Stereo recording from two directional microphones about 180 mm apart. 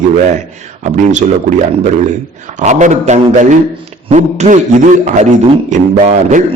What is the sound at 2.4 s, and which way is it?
A man's voice, 40° right (ahead or behind).